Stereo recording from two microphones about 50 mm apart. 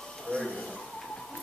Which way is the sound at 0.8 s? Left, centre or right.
Centre.